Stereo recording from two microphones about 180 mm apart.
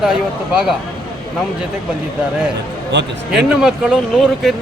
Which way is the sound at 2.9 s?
80° right.